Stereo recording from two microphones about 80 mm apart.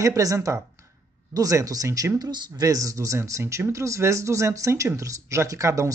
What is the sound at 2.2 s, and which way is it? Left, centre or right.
Speech, right.